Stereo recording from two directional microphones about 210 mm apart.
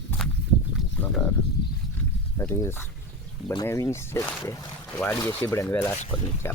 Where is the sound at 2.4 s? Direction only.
15° left (ahead or behind).